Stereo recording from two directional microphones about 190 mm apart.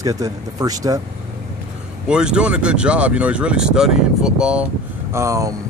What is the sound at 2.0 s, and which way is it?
Speech, 5° right (ahead or behind).